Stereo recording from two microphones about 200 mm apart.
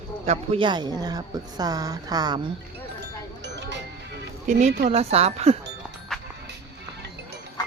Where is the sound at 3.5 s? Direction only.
60° right (ahead or behind).